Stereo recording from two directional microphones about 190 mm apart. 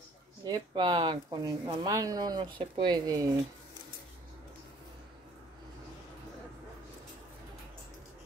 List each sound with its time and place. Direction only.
0.5 s speech: 25° right (ahead or behind)